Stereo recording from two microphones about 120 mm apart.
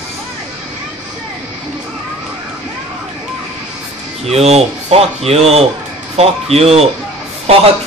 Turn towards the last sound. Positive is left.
turn(degrees=-55)  # may be behind; listen again after turning